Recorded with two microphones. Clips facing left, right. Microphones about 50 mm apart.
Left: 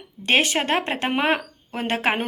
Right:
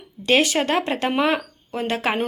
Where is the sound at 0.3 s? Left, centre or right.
Left.